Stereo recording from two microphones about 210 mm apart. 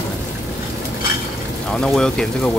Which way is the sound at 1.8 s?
5° left (ahead or behind).